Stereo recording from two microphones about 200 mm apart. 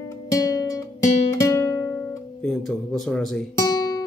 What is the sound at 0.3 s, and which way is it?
Guitar, 15° left (ahead or behind).